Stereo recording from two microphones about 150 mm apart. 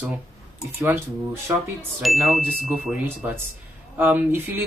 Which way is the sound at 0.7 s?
15° right (ahead or behind).